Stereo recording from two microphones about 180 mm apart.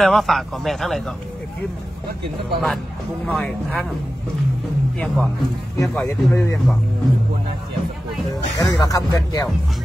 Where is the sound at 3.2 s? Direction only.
5° left (ahead or behind).